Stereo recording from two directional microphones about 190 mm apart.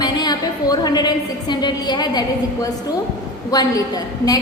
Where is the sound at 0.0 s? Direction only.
20° left (ahead or behind).